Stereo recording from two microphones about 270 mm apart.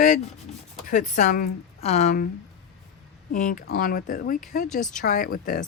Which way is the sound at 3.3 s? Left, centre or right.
Left.